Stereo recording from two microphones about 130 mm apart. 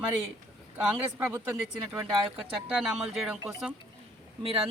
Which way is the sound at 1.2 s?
15° right (ahead or behind).